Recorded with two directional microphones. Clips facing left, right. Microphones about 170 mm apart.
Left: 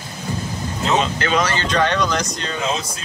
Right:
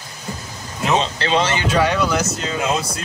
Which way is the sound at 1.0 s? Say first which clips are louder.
Even; 30° right (ahead or behind).